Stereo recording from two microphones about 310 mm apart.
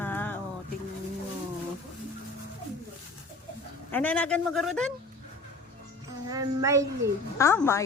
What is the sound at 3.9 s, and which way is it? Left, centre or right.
Speech, centre.